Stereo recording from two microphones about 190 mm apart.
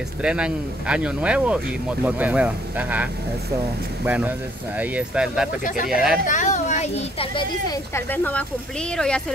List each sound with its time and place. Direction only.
0.2 s speech: 5° right (ahead or behind)
6.2 s a child's voice: 40° left (ahead or behind)
7.7 s speech: 10° left (ahead or behind)